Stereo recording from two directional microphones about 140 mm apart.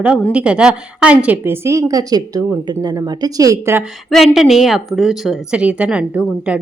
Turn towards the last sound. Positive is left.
turn(degrees=-10)  # may be behind; listen again after turning